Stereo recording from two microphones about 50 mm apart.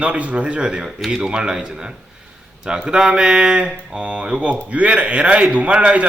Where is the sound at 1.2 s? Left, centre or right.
Centre.